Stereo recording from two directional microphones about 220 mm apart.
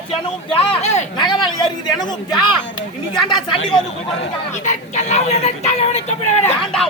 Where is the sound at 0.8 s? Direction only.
30° left (ahead or behind).